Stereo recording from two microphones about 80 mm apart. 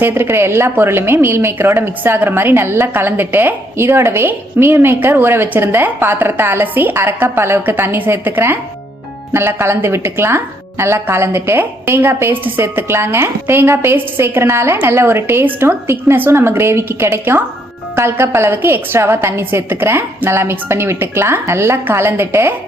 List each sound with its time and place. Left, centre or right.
0.0 s a woman's voice: right